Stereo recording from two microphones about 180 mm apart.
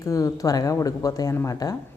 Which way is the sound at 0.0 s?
20° left (ahead or behind).